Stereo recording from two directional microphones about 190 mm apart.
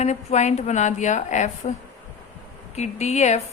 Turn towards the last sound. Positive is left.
turn(degrees=35)  # may be behind; listen again after turning